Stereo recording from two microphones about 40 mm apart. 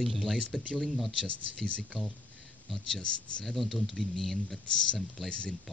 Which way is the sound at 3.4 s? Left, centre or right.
Centre.